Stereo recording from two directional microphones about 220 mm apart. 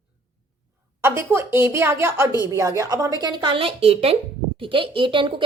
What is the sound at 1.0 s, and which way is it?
Speech, 10° right (ahead or behind).